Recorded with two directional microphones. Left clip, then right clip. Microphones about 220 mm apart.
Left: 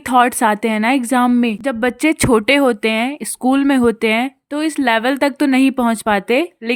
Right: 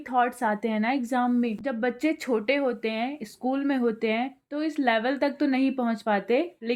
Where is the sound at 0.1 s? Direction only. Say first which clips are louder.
Left 12 dB; 40° left (ahead or behind).